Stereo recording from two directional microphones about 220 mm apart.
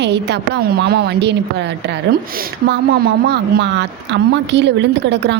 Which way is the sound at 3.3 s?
50° right (ahead or behind).